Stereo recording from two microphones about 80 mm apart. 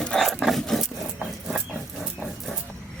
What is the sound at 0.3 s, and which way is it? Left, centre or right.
Dog, centre.